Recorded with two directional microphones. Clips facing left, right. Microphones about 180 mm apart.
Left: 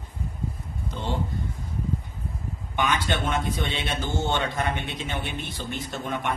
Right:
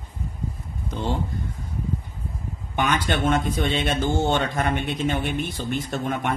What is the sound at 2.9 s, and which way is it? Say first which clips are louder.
A man's voice: right 7 dB; 45° right (ahead or behind).